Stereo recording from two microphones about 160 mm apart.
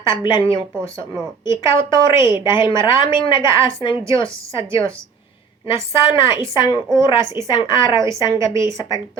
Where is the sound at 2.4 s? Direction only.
30° left (ahead or behind).